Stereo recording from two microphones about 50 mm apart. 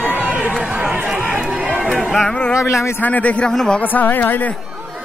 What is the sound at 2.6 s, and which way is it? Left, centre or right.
Speech, left.